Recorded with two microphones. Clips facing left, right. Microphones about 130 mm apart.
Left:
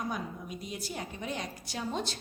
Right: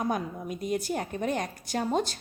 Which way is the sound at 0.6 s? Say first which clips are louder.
Right 11 dB; 50° right (ahead or behind).